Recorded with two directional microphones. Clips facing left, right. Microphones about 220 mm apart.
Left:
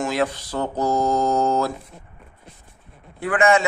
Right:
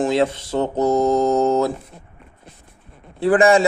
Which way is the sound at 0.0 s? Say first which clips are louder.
Right 5 dB; 25° right (ahead or behind).